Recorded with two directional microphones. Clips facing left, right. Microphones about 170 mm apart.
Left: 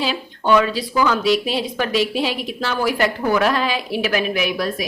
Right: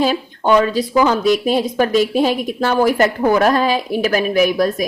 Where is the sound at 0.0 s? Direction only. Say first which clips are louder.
Right 6 dB; 45° right (ahead or behind).